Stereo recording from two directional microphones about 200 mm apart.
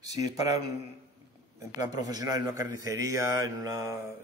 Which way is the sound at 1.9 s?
20° right (ahead or behind).